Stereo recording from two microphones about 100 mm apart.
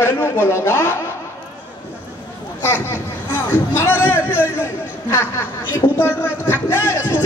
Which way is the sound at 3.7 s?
25° left (ahead or behind).